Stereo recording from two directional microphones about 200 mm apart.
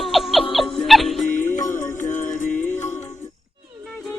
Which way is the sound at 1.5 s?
15° left (ahead or behind).